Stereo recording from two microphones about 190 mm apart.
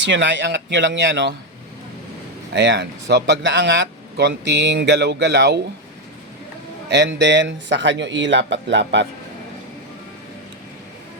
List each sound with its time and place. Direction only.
0.0 s speech: 70° right (ahead or behind)
2.5 s speech: 65° right (ahead or behind)
6.9 s speech: 65° right (ahead or behind)